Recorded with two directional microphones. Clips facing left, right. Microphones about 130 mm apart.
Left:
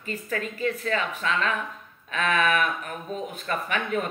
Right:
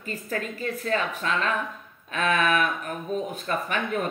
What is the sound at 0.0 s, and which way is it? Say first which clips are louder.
Speech: even; 40° right (ahead or behind).